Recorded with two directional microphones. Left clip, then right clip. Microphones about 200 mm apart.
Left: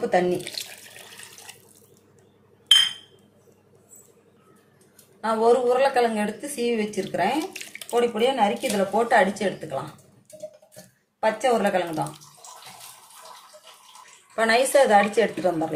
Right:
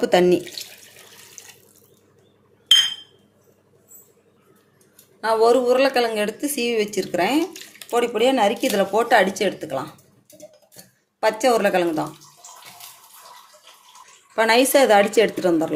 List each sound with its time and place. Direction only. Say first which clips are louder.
0.0 s speech: right 5 dB; 50° right (ahead or behind)
5.2 s speech: right 3 dB; 50° right (ahead or behind)
11.2 s speech: right 3 dB; 55° right (ahead or behind)
14.3 s speech: right 3 dB; 45° right (ahead or behind)